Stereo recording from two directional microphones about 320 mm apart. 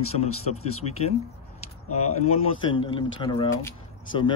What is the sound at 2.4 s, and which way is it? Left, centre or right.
Speech, centre.